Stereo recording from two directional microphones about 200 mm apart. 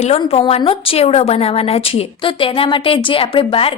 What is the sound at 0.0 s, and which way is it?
A woman's voice, 30° left (ahead or behind).